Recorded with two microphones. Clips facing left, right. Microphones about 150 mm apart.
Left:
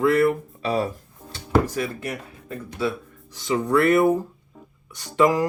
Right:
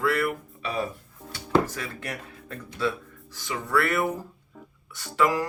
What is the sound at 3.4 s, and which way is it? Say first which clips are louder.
Speech: left 6 dB; 20° left (ahead or behind).